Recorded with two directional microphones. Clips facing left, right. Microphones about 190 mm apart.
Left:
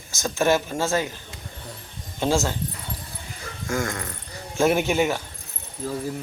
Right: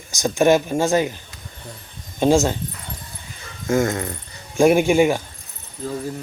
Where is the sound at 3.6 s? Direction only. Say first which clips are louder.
Right 8 dB; 20° right (ahead or behind).